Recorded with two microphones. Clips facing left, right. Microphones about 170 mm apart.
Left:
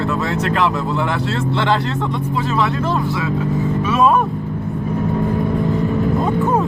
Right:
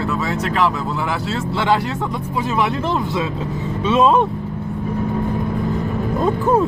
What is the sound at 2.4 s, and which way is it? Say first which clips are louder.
Speech: right 1 dB; 20° right (ahead or behind).